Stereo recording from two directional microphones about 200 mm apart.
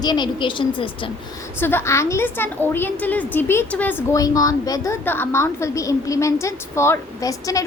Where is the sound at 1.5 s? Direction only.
10° left (ahead or behind).